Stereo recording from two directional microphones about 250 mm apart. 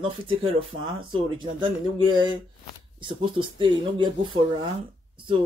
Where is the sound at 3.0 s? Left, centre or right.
Centre.